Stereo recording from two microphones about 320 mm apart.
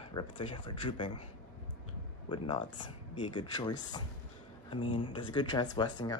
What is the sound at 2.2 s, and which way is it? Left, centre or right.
Speech, centre.